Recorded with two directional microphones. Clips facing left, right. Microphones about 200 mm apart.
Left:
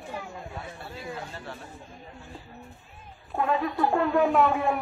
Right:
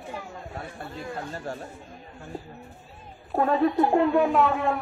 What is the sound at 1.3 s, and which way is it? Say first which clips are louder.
Speech: right 6 dB; 45° right (ahead or behind).